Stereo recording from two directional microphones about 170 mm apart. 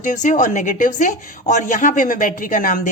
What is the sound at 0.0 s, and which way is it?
A woman's voice, 50° left (ahead or behind).